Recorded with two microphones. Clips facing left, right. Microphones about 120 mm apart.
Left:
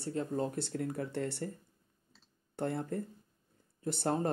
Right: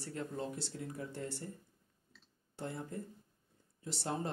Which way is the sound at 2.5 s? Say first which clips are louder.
Left 7 dB; 60° left (ahead or behind).